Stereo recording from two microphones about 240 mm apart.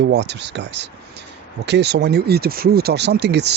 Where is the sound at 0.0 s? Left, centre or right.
Right.